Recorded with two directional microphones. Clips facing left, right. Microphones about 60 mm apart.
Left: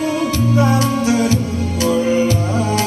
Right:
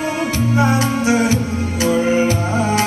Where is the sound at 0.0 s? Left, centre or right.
Right.